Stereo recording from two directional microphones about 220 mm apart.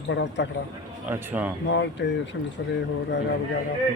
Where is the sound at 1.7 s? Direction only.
55° left (ahead or behind).